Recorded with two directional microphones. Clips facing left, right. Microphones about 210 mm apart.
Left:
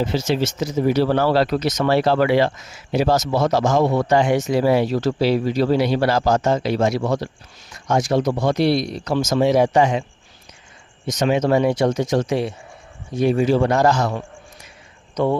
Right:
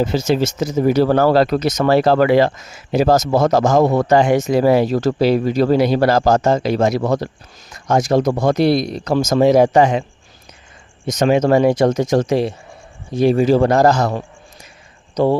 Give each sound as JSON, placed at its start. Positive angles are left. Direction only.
{"t": 0.0, "sound": "speech", "side_deg": -45}
{"t": 11.0, "sound": "a man's voice", "side_deg": -50}